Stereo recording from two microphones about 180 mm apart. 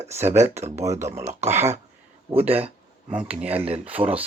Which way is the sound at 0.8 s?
15° right (ahead or behind).